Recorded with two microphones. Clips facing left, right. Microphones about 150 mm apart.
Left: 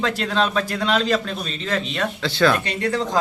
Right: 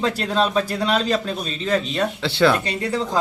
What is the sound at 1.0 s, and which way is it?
A man's voice, 35° right (ahead or behind).